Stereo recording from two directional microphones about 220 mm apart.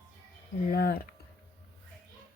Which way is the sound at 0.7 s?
45° left (ahead or behind).